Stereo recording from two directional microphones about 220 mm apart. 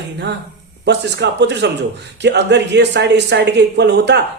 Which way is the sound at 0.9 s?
50° right (ahead or behind).